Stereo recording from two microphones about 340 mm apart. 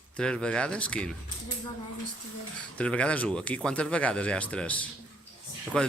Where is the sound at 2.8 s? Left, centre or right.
Centre.